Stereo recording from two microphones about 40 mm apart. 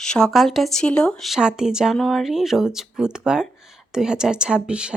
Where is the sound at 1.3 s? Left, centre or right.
Centre.